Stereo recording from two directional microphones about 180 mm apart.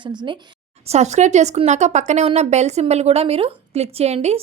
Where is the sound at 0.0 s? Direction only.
25° right (ahead or behind).